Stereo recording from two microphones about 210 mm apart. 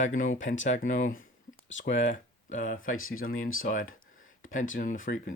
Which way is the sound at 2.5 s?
40° left (ahead or behind).